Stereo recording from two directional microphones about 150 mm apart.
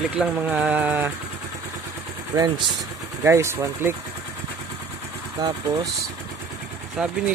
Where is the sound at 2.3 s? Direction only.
35° right (ahead or behind).